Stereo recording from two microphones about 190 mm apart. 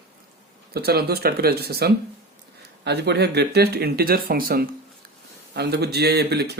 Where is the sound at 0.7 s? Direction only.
55° right (ahead or behind).